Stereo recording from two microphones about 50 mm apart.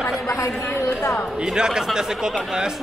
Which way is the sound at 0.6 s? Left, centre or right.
Left.